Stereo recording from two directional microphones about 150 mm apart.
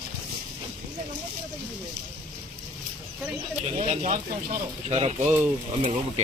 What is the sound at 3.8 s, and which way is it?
Speech, 50° right (ahead or behind).